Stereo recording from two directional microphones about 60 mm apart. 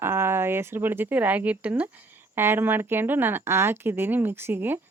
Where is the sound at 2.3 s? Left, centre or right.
Right.